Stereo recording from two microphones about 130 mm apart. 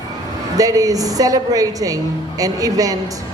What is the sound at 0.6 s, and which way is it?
A man's voice, 25° right (ahead or behind).